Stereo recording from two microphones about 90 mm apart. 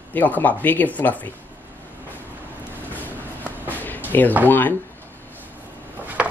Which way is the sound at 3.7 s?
20° left (ahead or behind).